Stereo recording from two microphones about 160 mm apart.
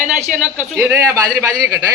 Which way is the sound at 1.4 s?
15° right (ahead or behind).